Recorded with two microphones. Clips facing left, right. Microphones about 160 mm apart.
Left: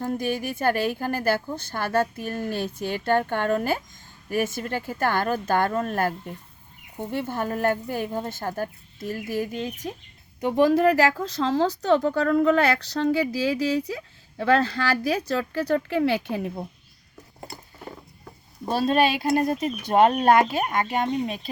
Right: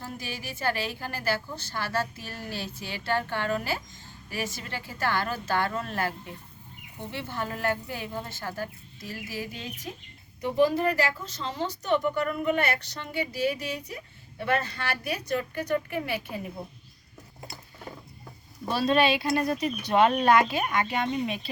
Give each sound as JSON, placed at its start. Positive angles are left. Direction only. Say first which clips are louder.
{"t": 0.0, "sound": "a woman's voice", "louder": "left 11 dB", "side_deg": 50}
{"t": 10.4, "sound": "a woman's voice", "louder": "left 5 dB", "side_deg": 90}
{"t": 18.7, "sound": "a woman's voice", "louder": "left 2 dB", "side_deg": 45}